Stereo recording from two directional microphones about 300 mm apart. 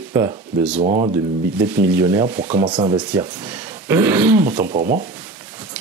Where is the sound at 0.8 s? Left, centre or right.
Right.